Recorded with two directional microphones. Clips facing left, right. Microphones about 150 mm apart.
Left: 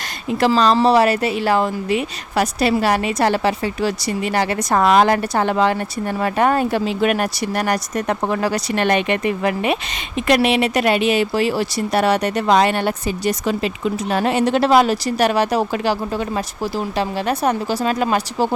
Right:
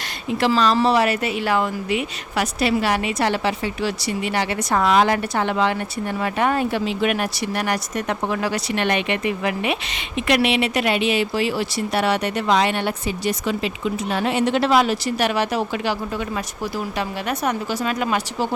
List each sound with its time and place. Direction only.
0.3 s speech: 40° left (ahead or behind)